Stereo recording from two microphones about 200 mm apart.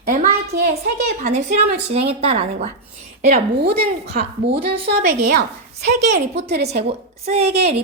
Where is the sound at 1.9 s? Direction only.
30° right (ahead or behind).